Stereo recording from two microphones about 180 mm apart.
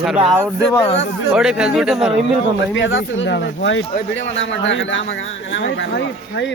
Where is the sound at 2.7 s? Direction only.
90° left.